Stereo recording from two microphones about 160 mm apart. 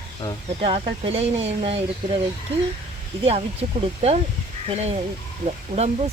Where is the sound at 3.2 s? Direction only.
40° right (ahead or behind).